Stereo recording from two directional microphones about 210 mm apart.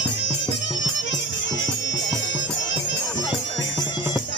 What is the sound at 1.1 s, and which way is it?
Music, 60° left (ahead or behind).